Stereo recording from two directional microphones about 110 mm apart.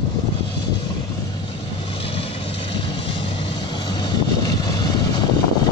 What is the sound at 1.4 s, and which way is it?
Vehicle, 55° left (ahead or behind).